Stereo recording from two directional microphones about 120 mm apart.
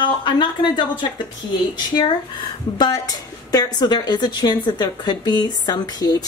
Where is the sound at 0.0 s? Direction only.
40° left (ahead or behind).